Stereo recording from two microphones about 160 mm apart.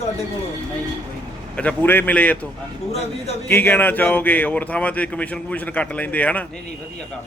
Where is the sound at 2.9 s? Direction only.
40° left (ahead or behind).